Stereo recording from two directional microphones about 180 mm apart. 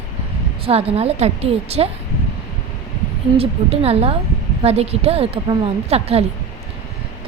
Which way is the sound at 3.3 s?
35° right (ahead or behind).